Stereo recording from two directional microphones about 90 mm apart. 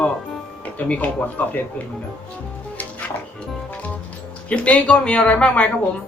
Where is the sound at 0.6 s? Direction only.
15° left (ahead or behind).